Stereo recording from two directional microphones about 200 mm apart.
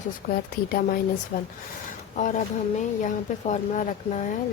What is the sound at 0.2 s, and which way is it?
Speech, 40° left (ahead or behind).